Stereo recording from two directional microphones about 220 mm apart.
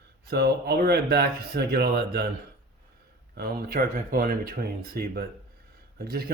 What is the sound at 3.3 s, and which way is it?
Speech, 45° right (ahead or behind).